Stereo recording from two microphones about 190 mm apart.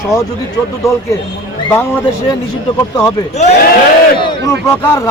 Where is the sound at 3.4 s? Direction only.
35° left (ahead or behind).